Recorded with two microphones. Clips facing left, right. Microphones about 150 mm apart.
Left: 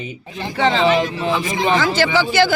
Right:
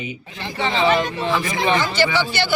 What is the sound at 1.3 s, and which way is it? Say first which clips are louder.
Speech: left 1 dB; 20° left (ahead or behind).